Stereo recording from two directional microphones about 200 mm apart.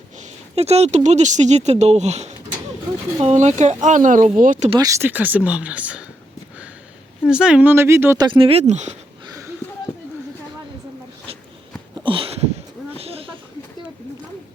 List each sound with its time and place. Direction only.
0.2 s speech: 30° right (ahead or behind)
4.8 s speech: 15° right (ahead or behind)
7.3 s speech: 5° right (ahead or behind)
8.3 s speech: 30° right (ahead or behind)
12.0 s a sound: 25° right (ahead or behind)